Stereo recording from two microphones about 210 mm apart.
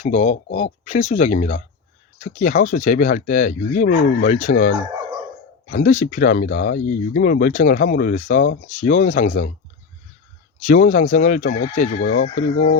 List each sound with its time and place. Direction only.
0.0 s speech: 35° left (ahead or behind)
10.7 s speech: 40° left (ahead or behind)